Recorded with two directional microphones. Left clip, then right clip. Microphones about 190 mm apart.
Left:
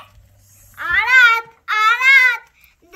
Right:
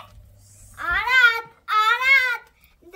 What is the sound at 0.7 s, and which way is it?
Child singing, 50° right (ahead or behind).